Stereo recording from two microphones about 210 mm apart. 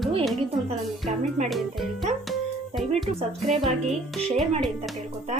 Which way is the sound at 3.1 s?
30° right (ahead or behind).